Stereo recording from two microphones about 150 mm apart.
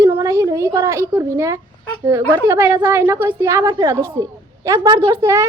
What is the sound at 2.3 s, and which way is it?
A woman's voice, 20° right (ahead or behind).